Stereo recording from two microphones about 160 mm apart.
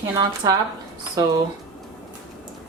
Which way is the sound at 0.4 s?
20° right (ahead or behind).